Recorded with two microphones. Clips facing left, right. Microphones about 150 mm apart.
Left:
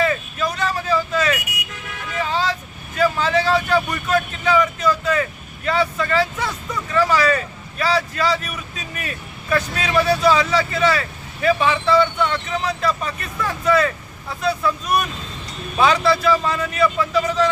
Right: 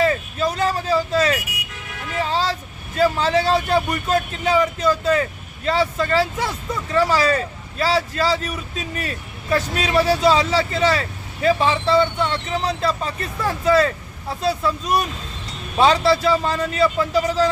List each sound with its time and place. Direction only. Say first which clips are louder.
0.0 s vehicle: right 1 dB; 35° right (ahead or behind)
2.2 s speech: even; 35° right (ahead or behind)
15.8 s speech: right 1 dB; 30° right (ahead or behind)